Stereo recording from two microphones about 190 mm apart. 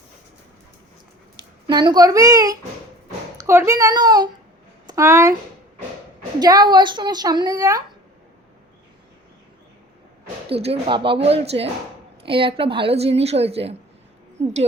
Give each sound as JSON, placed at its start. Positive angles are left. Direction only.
{"t": 1.4, "sound": "a child's voice", "side_deg": -25}
{"t": 6.4, "sound": "a child's voice", "side_deg": -20}
{"t": 10.5, "sound": "a woman's voice", "side_deg": -30}